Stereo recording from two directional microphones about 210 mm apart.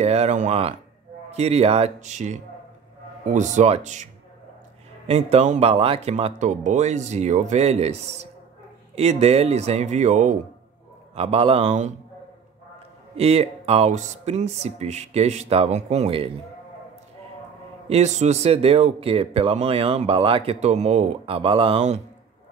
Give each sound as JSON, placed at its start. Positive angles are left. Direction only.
{"t": 0.0, "sound": "speech", "side_deg": -30}
{"t": 13.2, "sound": "speech", "side_deg": -30}
{"t": 17.8, "sound": "speech", "side_deg": -30}